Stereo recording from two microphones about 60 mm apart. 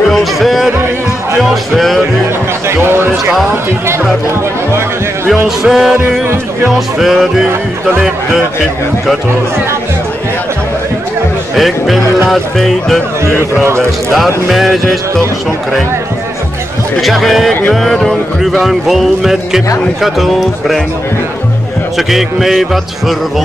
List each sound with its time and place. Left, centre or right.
0.1 s music: centre
1.5 s speech: centre
2.7 s a sound: right
5.7 s music: centre
11.5 s music: centre
13.4 s speech: right
14.1 s music: centre
17.0 s music: centre
21.9 s music: centre